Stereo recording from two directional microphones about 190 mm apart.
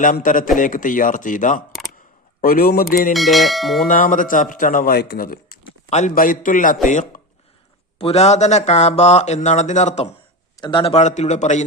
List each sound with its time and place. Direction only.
0.0 s speech: 45° left (ahead or behind)
3.1 s bell: centre (ahead or behind)
3.8 s speech: 45° left (ahead or behind)
10.6 s speech: 25° left (ahead or behind)